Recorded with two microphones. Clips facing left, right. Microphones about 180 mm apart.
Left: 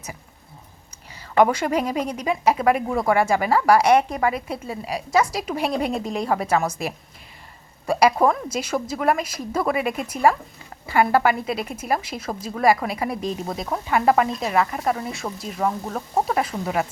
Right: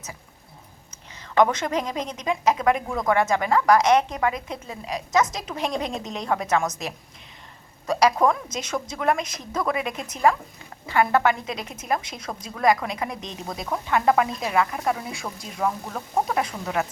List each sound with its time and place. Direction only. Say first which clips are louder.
1.2 s a woman's voice: left 2 dB; 10° left (ahead or behind)
7.9 s a woman's voice: left 2 dB; 10° left (ahead or behind)